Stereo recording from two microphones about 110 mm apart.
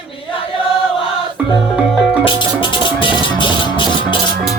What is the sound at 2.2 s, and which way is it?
Music, 45° left (ahead or behind).